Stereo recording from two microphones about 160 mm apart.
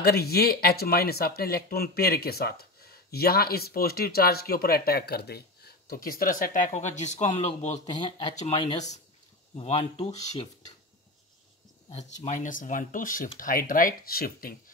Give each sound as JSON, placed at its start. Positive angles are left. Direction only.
{"t": 0.0, "sound": "speech", "side_deg": 75}
{"t": 11.9, "sound": "speech", "side_deg": 45}